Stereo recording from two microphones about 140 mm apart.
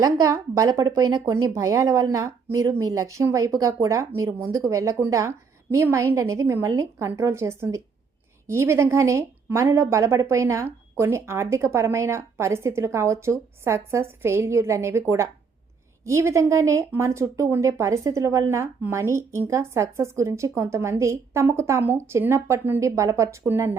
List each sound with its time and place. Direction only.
0.0 s speech: 25° right (ahead or behind)